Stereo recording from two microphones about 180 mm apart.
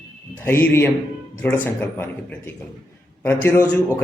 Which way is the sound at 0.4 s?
10° left (ahead or behind).